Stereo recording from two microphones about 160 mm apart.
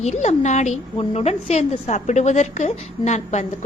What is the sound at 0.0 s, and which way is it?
A woman's voice, 45° left (ahead or behind).